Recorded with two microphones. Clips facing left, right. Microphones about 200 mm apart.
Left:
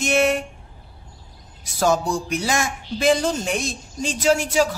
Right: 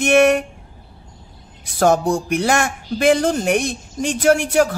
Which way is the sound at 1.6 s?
55° right (ahead or behind).